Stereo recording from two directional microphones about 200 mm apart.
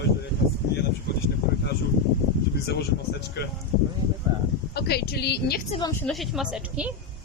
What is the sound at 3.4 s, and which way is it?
Speech, 55° left (ahead or behind).